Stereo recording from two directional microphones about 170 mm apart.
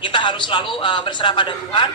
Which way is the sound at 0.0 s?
30° left (ahead or behind).